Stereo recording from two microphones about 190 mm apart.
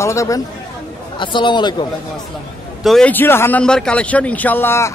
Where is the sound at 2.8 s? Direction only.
5° left (ahead or behind).